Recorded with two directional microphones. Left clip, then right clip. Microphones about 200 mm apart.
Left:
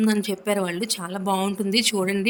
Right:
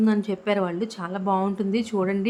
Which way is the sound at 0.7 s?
55° left (ahead or behind).